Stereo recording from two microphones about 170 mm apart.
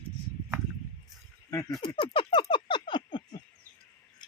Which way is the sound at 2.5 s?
30° left (ahead or behind).